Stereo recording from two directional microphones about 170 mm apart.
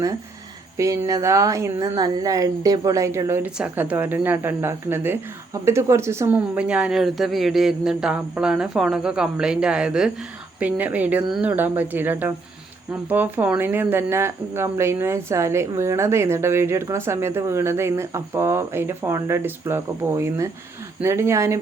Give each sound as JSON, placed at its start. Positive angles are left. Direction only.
{"t": 0.8, "sound": "speech", "side_deg": -20}